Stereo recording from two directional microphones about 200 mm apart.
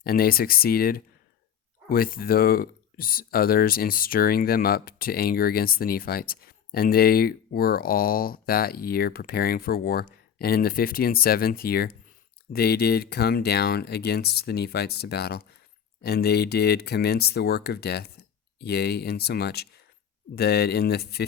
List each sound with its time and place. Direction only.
0.0 s speech: 50° left (ahead or behind)